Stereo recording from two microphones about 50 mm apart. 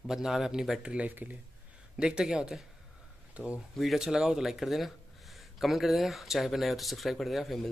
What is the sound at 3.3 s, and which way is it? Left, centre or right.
Speech, right.